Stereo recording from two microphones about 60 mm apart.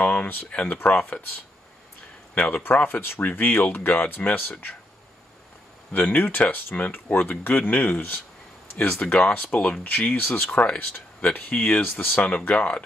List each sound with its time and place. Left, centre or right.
0.0 s speech: left
2.3 s speech: centre
2.6 s speech: left
5.9 s speech: left
8.9 s speech: centre
9.8 s speech: left
10.6 s speech: left
11.6 s speech: left
12.4 s speech: left